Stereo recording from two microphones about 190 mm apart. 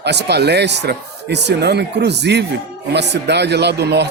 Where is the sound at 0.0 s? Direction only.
60° right (ahead or behind).